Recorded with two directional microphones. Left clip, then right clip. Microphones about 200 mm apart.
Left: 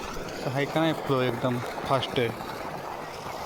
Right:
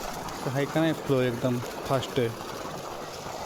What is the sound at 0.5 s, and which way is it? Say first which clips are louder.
Speech: left 1 dB; 10° right (ahead or behind).